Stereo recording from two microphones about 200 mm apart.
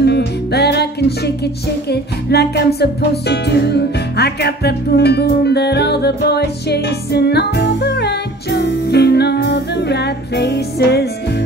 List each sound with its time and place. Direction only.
0.0 s music: 55° left (ahead or behind)